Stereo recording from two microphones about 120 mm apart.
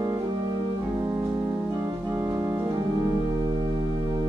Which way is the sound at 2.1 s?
25° right (ahead or behind).